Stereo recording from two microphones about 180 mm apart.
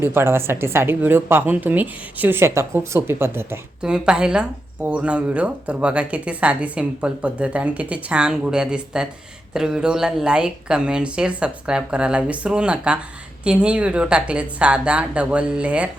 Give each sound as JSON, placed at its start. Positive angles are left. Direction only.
{"t": 0.0, "sound": "a woman's voice", "side_deg": -15}